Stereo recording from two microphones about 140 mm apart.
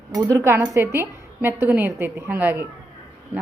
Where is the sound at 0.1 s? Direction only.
25° right (ahead or behind).